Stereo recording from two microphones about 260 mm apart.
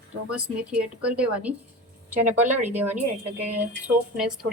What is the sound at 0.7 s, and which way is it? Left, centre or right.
A woman's voice, centre.